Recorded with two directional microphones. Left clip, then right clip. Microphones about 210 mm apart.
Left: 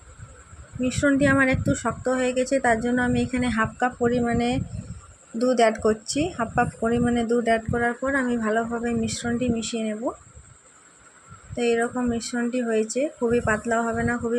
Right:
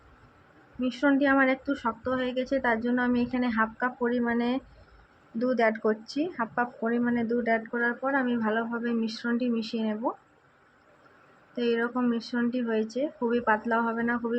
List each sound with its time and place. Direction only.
0.8 s speech: 25° left (ahead or behind)
11.5 s speech: 20° left (ahead or behind)